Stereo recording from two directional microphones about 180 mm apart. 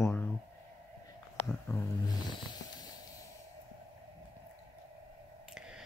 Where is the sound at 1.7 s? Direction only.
15° left (ahead or behind).